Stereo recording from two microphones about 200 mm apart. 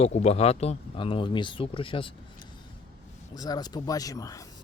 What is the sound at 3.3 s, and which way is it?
Speech, 20° left (ahead or behind).